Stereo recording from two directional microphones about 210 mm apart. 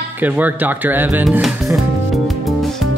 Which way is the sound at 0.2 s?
10° right (ahead or behind).